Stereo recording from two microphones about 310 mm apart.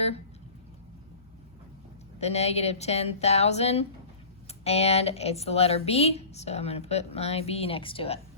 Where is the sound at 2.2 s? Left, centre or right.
Centre.